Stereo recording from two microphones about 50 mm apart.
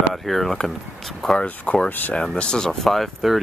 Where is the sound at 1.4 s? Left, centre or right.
Left.